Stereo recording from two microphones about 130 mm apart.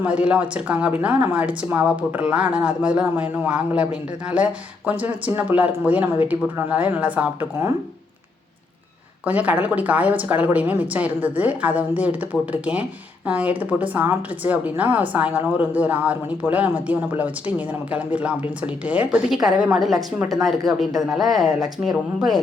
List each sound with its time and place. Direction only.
0.0 s a woman's voice: 10° right (ahead or behind)
4.9 s a woman's voice: 10° right (ahead or behind)
9.2 s a woman's voice: 10° right (ahead or behind)